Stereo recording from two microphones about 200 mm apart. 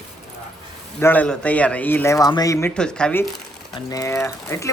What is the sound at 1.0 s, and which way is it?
Speech, 10° left (ahead or behind).